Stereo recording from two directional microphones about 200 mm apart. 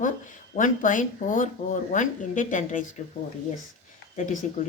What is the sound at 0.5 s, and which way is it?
Speech, 40° left (ahead or behind).